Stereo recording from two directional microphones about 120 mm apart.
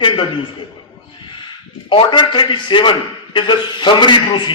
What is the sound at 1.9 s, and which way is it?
A man's voice, 40° left (ahead or behind).